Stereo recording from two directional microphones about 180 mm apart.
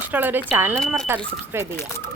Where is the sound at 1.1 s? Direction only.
15° right (ahead or behind).